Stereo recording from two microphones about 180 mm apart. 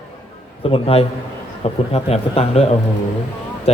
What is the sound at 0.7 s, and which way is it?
A man's voice, 30° left (ahead or behind).